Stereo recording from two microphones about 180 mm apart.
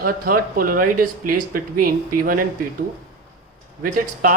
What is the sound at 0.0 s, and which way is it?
Speech, 50° right (ahead or behind).